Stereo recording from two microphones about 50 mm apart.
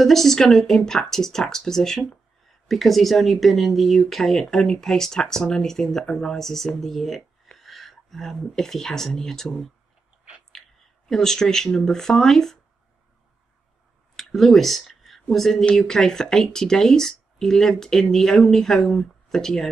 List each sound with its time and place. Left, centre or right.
0.0 s speech: centre
11.1 s speech: centre
14.1 s speech: centre